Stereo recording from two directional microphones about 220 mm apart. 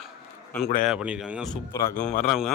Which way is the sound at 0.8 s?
5° right (ahead or behind).